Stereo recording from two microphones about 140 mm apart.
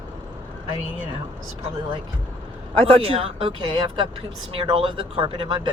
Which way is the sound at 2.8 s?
40° right (ahead or behind).